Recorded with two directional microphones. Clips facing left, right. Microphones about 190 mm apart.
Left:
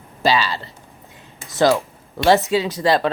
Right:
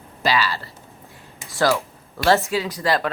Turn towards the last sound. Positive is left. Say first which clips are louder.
# left 4 dB
turn(degrees=25)  # may be behind; listen again after turning